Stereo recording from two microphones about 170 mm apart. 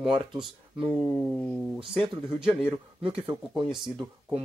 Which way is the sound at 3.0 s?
30° right (ahead or behind).